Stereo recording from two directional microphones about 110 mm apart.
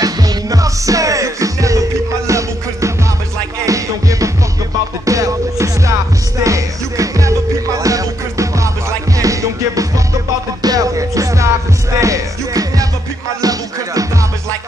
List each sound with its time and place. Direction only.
0.0 s music: 35° right (ahead or behind)